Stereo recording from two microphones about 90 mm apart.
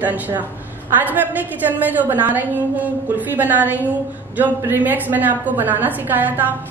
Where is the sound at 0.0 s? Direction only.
20° right (ahead or behind).